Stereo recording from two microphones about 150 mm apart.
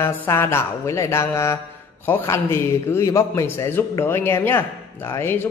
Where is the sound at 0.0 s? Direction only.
15° left (ahead or behind).